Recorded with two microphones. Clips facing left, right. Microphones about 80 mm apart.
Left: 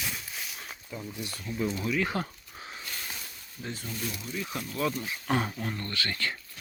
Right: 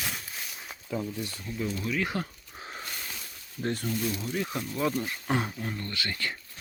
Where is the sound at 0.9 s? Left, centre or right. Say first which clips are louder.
Right 8 dB; right.